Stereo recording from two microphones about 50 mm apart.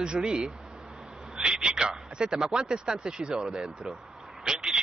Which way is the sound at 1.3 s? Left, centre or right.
Centre.